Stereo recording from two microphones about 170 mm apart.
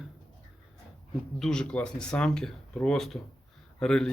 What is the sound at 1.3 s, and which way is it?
Speech, 5° left (ahead or behind).